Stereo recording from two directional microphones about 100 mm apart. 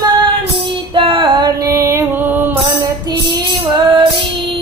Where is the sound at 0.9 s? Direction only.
55° right (ahead or behind).